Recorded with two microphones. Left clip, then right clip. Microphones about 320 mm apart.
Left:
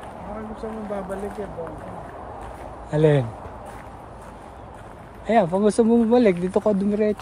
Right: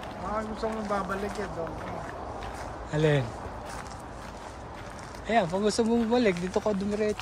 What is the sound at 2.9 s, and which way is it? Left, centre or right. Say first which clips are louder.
Speech: left 7 dB; centre.